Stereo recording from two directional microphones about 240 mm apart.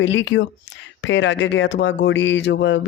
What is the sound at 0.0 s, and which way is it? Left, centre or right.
Speech, left.